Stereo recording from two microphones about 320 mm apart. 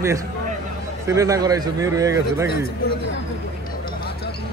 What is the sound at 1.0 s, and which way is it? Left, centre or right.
Speech, centre.